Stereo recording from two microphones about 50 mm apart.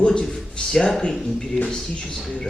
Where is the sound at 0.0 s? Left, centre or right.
Centre.